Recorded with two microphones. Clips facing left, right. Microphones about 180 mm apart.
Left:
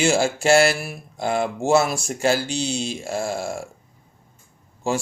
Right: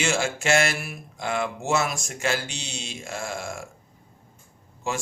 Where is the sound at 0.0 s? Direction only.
35° left (ahead or behind).